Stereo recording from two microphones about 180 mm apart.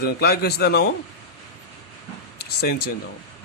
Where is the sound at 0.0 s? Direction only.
60° left (ahead or behind).